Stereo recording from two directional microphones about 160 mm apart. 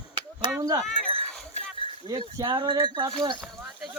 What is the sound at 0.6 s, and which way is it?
Speech, 20° right (ahead or behind).